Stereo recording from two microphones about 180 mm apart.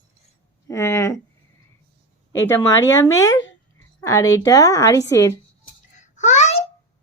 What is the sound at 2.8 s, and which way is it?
A woman's voice, 20° left (ahead or behind).